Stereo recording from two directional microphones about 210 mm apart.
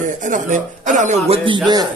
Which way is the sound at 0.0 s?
35° right (ahead or behind).